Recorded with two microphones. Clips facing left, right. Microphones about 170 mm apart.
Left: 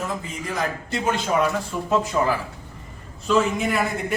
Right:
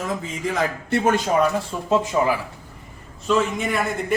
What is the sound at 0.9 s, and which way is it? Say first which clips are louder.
Speech: right 7 dB; 50° right (ahead or behind).